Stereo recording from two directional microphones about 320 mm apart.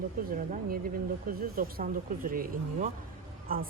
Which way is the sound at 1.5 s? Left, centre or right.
Right.